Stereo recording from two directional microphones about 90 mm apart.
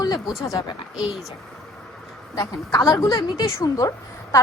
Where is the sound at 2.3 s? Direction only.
40° left (ahead or behind).